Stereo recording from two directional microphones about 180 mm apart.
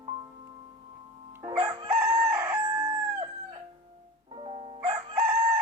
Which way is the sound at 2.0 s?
20° right (ahead or behind).